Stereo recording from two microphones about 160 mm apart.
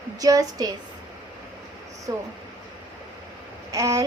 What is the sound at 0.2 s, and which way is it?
Speech, 20° right (ahead or behind).